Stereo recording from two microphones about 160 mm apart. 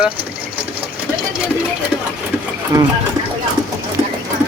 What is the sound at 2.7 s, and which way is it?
Speech, 20° right (ahead or behind).